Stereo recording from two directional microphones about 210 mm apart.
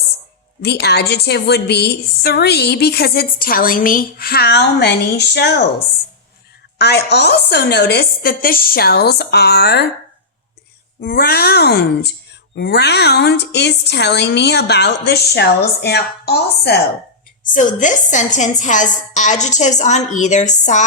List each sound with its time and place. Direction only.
0.6 s a woman's voice: 50° left (ahead or behind)
6.7 s a woman's voice: 50° left (ahead or behind)
11.0 s a woman's voice: 45° left (ahead or behind)
17.4 s a woman's voice: 40° left (ahead or behind)